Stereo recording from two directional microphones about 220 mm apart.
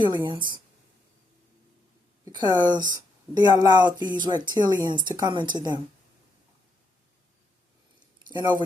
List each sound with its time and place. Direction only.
0.3 s speech: 20° right (ahead or behind)
2.2 s speech: 15° right (ahead or behind)
8.3 s speech: 20° right (ahead or behind)